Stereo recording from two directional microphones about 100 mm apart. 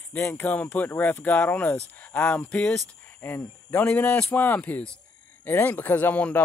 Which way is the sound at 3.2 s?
20° left (ahead or behind).